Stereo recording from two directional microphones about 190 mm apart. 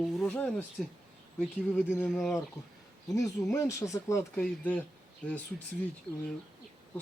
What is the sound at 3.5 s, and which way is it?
Speech, 15° left (ahead or behind).